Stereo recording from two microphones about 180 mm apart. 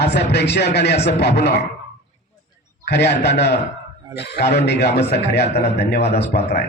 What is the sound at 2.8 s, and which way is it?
A man's voice, 70° left (ahead or behind).